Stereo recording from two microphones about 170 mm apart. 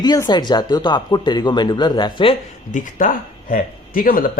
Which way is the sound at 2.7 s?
50° left (ahead or behind).